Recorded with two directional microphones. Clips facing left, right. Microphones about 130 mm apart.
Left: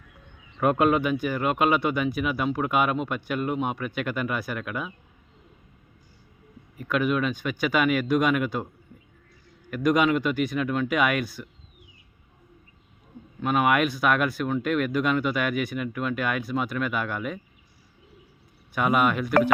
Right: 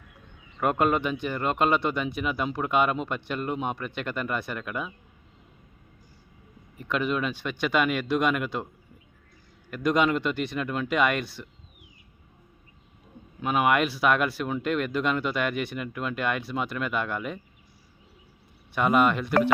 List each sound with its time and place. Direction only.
0.6 s speech: 5° left (ahead or behind)
6.7 s speech: 5° left (ahead or behind)
9.6 s speech: 5° left (ahead or behind)
13.4 s speech: 5° right (ahead or behind)
18.7 s speech: 5° left (ahead or behind)